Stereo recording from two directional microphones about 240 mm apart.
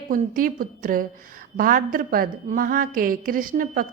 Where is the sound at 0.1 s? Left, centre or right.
Right.